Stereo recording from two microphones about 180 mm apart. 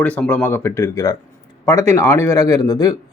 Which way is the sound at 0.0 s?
10° left (ahead or behind).